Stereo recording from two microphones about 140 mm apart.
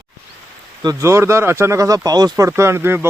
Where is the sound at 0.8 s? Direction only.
25° right (ahead or behind).